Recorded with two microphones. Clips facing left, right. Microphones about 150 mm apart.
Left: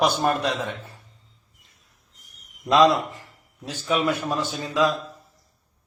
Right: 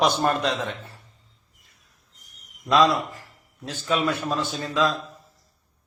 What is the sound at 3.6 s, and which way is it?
A man's voice, 10° left (ahead or behind).